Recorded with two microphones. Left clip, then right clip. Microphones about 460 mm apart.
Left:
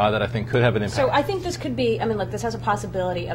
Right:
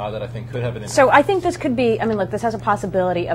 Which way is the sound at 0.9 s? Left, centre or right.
Right.